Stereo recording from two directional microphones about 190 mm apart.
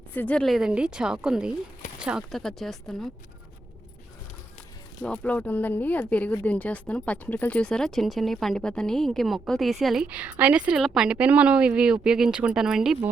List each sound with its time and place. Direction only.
0.1 s speech: 10° left (ahead or behind)
5.0 s speech: 5° left (ahead or behind)